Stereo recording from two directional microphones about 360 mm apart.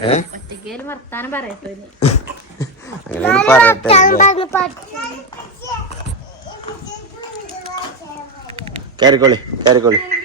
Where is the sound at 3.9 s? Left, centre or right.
Left.